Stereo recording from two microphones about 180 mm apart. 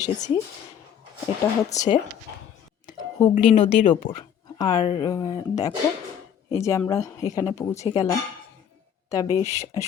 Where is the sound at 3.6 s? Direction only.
30° left (ahead or behind).